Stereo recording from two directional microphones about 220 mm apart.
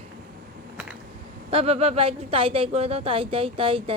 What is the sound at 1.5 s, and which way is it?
Speech, 25° right (ahead or behind).